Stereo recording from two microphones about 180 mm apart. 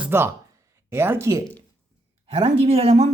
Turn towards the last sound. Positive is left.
turn(degrees=-35)  # may be behind; listen again after turning